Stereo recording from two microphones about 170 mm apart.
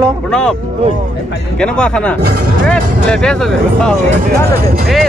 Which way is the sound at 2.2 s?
70° right (ahead or behind).